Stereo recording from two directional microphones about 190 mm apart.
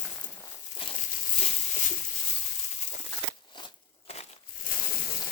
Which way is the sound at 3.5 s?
30° left (ahead or behind).